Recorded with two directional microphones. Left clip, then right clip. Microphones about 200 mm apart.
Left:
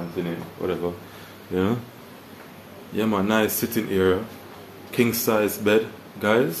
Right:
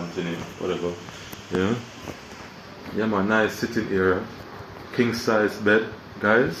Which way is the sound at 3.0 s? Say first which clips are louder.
Even; 15° left (ahead or behind).